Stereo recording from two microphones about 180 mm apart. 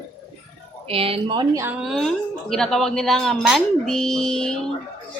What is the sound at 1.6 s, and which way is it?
A woman's voice, 5° right (ahead or behind).